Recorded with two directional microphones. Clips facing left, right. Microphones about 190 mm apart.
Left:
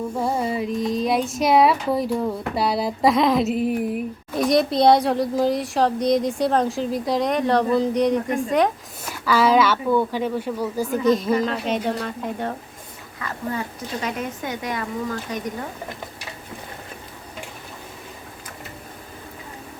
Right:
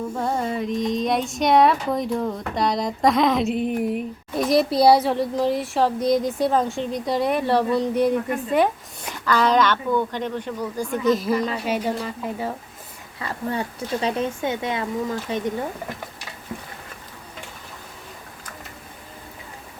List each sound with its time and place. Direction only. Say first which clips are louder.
0.2 s speech: left 1 dB; 5° left (ahead or behind)
9.0 s speech: left 2 dB; 5° left (ahead or behind)
13.1 s speech: right 1 dB; 30° right (ahead or behind)